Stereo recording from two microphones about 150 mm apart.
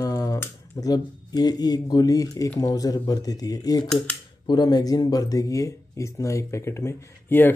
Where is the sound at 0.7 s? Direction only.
25° left (ahead or behind).